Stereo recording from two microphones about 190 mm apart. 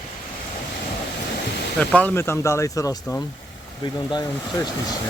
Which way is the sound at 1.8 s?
5° left (ahead or behind).